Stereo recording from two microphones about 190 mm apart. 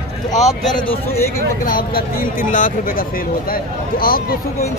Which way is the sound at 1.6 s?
50° left (ahead or behind).